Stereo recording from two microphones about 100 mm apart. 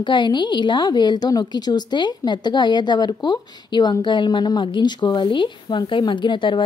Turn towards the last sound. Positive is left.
turn(degrees=55)  # may be behind; listen again after turning